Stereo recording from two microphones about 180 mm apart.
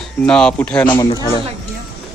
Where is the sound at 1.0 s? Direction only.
25° left (ahead or behind).